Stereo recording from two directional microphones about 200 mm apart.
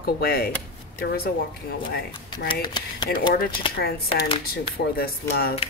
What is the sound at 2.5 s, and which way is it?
Speech, 20° left (ahead or behind).